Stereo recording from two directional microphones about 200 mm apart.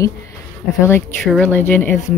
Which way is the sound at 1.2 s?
5° left (ahead or behind).